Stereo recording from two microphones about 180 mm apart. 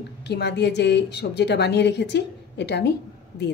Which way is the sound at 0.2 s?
70° left (ahead or behind).